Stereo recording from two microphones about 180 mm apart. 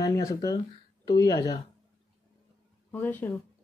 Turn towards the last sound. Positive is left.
turn(degrees=10)  # may be behind; listen again after turning